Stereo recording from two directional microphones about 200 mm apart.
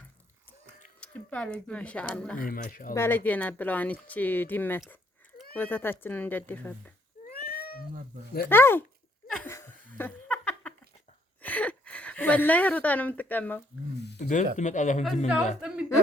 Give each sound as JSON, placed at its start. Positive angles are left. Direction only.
{"t": 1.0, "sound": "speech", "side_deg": 5}
{"t": 2.4, "sound": "speech", "side_deg": 45}
{"t": 2.9, "sound": "speech", "side_deg": 10}
{"t": 7.3, "sound": "cat", "side_deg": 50}
{"t": 8.4, "sound": "speech", "side_deg": 10}
{"t": 9.3, "sound": "laughter", "side_deg": 10}
{"t": 11.4, "sound": "speech", "side_deg": 5}
{"t": 14.2, "sound": "a sound", "side_deg": 40}
{"t": 14.5, "sound": "speech", "side_deg": 35}
{"t": 15.6, "sound": "a woman's voice", "side_deg": -5}